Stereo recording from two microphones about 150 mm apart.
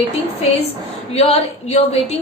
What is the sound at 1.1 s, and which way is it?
A woman's voice, 45° left (ahead or behind).